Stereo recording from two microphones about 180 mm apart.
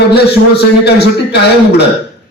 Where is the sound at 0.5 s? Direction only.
70° left (ahead or behind).